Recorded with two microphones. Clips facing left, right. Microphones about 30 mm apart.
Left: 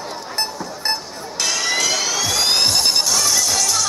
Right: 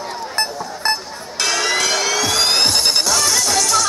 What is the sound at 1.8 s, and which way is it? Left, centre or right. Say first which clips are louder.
Music: right 2 dB; right.